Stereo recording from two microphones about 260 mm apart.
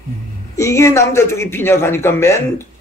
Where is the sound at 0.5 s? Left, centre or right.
Centre.